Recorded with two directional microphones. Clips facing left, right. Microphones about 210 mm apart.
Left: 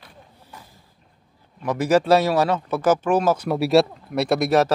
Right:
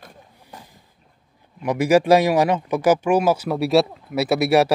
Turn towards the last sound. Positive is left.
turn(degrees=-10)  # may be behind; listen again after turning